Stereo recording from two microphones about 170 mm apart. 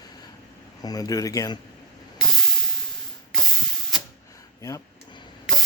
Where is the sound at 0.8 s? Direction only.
20° left (ahead or behind).